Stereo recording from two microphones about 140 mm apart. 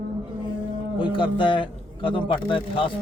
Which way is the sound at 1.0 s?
35° left (ahead or behind).